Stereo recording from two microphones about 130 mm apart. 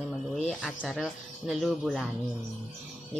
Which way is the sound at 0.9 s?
Centre (ahead or behind).